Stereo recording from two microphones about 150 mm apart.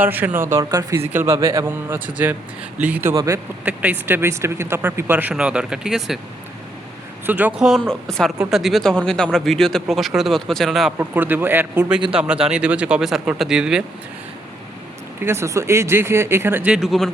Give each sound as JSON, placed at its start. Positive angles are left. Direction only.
{"t": 0.0, "sound": "speech", "side_deg": -10}
{"t": 3.6, "sound": "speech", "side_deg": -10}
{"t": 7.3, "sound": "speech", "side_deg": -10}
{"t": 10.9, "sound": "speech", "side_deg": -10}
{"t": 15.2, "sound": "speech", "side_deg": -15}